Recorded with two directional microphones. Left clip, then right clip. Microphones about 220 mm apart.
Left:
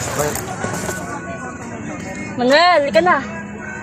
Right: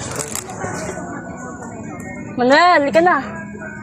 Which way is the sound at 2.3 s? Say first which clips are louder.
Right 1 dB; 30° right (ahead or behind).